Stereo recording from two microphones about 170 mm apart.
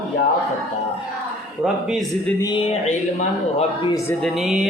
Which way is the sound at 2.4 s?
30° left (ahead or behind).